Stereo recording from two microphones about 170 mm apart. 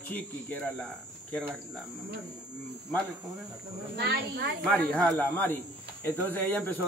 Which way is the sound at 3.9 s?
90° right.